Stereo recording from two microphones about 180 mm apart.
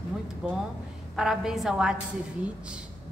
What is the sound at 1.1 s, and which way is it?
A woman's voice, 5° right (ahead or behind).